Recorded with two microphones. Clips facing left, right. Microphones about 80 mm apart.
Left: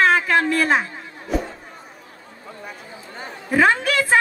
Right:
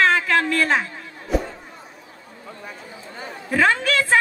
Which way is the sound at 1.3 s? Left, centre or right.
Centre.